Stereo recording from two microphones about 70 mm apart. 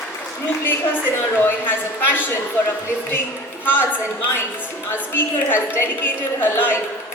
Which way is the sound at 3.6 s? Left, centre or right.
Left.